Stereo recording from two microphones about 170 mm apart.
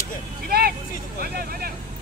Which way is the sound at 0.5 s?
65° right (ahead or behind).